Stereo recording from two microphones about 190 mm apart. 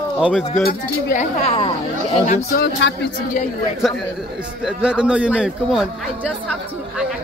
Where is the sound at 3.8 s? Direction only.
Centre (ahead or behind).